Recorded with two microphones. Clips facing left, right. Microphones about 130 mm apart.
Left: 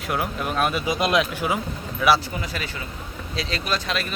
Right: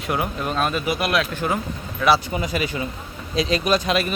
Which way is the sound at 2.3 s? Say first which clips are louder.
Right 6 dB; 15° right (ahead or behind).